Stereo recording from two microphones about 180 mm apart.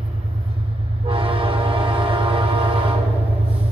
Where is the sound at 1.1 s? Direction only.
30° right (ahead or behind).